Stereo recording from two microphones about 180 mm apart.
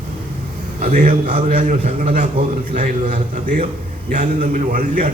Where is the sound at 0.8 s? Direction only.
45° right (ahead or behind).